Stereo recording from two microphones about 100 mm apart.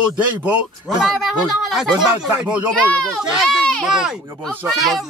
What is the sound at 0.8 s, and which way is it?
Speech, centre (ahead or behind).